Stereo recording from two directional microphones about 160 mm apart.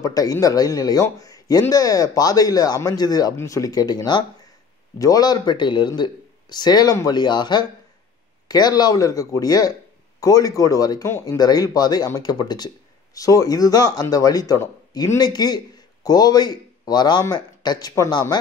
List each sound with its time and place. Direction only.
0.0 s speech: 20° left (ahead or behind)